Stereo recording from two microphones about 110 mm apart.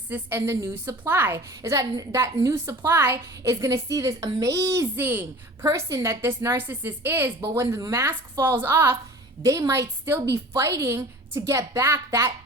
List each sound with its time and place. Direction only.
0.1 s a woman's voice: 20° right (ahead or behind)